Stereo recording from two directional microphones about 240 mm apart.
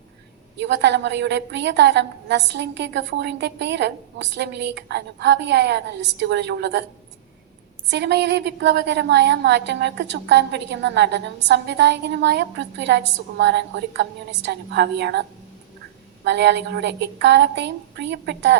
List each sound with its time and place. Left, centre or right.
0.6 s a woman's voice: right
7.9 s a woman's voice: right